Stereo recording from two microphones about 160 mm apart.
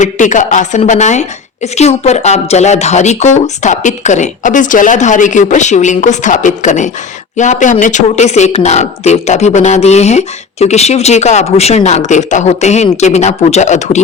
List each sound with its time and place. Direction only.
0.0 s speech: 50° left (ahead or behind)